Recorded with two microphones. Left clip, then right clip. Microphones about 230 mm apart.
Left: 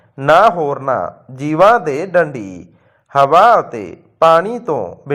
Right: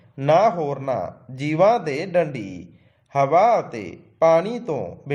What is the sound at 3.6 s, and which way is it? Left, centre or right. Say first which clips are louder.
A man's voice: left 8 dB; centre.